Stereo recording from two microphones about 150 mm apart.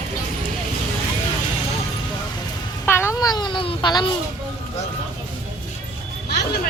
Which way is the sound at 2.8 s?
15° left (ahead or behind).